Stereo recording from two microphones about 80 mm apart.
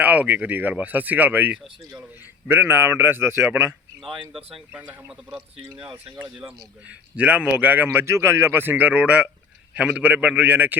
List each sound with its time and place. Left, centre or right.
0.0 s a man's voice: centre
4.0 s speech: centre
4.7 s a man's voice: centre
5.8 s speech: centre
7.2 s a man's voice: centre